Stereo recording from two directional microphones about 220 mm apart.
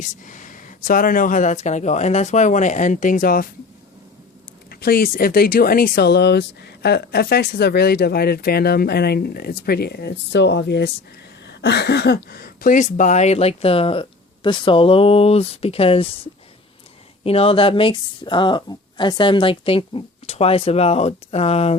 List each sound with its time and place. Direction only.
0.3 s speech: 35° left (ahead or behind)
4.7 s speech: 45° left (ahead or behind); by 16.0 s 25° left (ahead or behind)
17.2 s speech: 25° left (ahead or behind)